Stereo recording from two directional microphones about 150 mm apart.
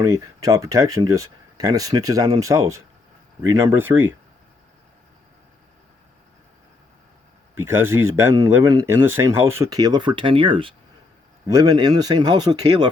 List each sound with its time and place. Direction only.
0.0 s speech: 25° right (ahead or behind)
7.5 s speech: 15° right (ahead or behind); by 10.8 s 35° right (ahead or behind)
11.4 s speech: 25° right (ahead or behind)